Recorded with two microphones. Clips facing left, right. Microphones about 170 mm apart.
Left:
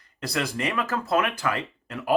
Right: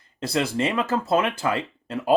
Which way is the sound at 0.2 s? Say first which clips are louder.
Right 5 dB; 25° right (ahead or behind).